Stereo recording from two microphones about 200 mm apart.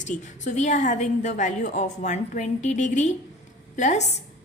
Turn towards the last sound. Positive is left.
turn(degrees=35)  # may be behind; listen again after turning